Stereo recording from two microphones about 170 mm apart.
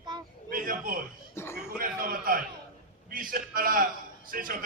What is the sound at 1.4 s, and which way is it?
Speech, 15° left (ahead or behind).